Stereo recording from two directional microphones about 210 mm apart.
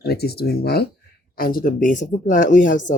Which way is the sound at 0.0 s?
50° left (ahead or behind).